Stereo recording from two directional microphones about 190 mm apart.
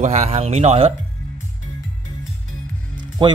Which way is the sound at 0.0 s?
35° right (ahead or behind).